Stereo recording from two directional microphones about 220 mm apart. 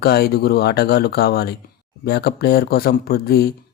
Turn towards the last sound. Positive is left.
turn(degrees=45)  # may be behind; listen again after turning